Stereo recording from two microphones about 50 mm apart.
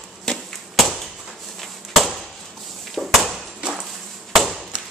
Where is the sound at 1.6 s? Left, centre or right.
Centre.